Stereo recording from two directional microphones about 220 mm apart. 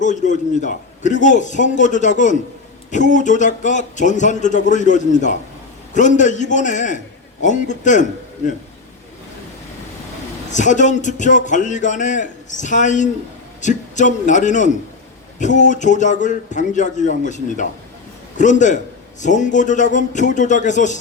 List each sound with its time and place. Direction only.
0.0 s a man's voice: 35° left (ahead or behind)
10.5 s a man's voice: 35° left (ahead or behind)